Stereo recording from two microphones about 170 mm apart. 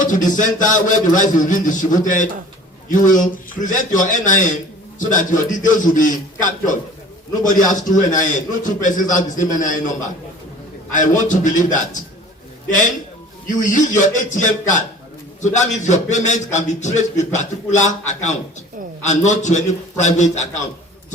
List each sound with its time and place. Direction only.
0.0 s a man's voice: 50° left (ahead or behind)
7.8 s a man's voice: 50° left (ahead or behind)
10.9 s a man's voice: 50° left (ahead or behind)
13.6 s a man's voice: 50° left (ahead or behind)